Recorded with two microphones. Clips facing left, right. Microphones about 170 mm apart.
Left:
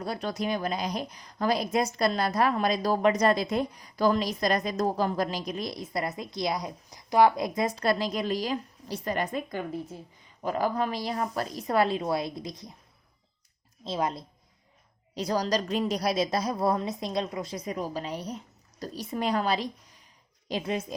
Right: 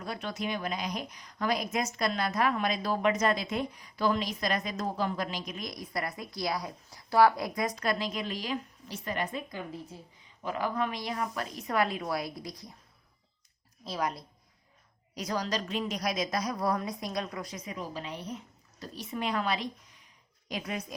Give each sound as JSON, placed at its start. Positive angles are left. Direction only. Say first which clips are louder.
{"t": 0.0, "sound": "a woman's voice", "louder": "left 4 dB", "side_deg": 35}
{"t": 10.4, "sound": "a woman's voice", "louder": "left 4 dB", "side_deg": 40}
{"t": 13.8, "sound": "a woman's voice", "louder": "left 3 dB", "side_deg": 25}